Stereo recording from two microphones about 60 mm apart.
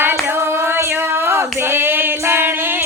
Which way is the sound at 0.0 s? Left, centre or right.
Right.